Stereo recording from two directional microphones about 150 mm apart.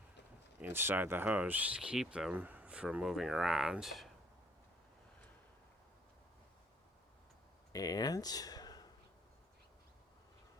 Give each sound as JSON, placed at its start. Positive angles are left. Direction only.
{"t": 0.6, "sound": "speech", "side_deg": -15}
{"t": 7.7, "sound": "speech", "side_deg": 25}